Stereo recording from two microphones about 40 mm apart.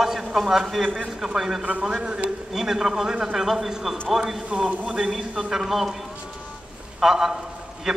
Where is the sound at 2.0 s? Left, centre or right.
Right.